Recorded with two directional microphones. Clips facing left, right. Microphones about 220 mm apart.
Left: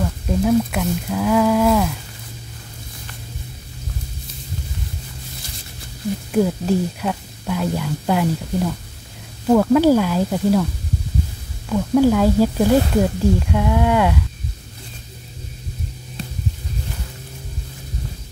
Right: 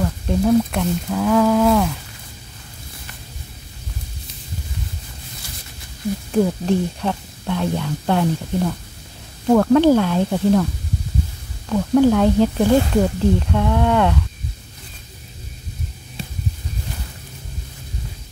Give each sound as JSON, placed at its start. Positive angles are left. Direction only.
{"t": 0.4, "sound": "speech", "side_deg": 5}
{"t": 6.3, "sound": "speech", "side_deg": 5}
{"t": 11.7, "sound": "speech", "side_deg": 5}